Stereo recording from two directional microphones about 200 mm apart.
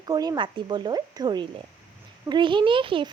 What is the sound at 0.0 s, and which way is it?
A woman's voice, 20° right (ahead or behind).